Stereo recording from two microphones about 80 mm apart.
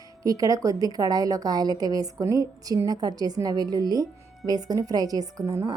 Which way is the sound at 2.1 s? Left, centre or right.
Right.